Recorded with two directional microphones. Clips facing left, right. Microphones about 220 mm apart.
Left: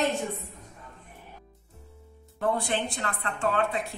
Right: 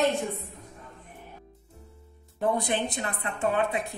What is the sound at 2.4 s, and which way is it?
A woman's voice, 20° right (ahead or behind).